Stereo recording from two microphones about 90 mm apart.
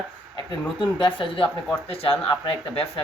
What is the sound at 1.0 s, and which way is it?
Speech, 70° left (ahead or behind).